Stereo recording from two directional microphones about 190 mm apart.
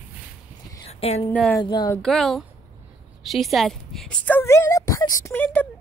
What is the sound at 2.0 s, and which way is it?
Speech, centre (ahead or behind).